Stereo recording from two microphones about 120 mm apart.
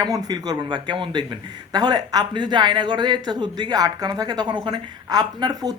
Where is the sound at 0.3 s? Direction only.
35° right (ahead or behind).